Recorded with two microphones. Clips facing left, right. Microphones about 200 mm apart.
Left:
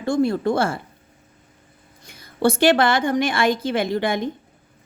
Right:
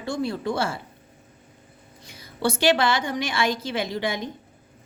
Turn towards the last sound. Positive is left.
turn(degrees=55)  # may be behind; listen again after turning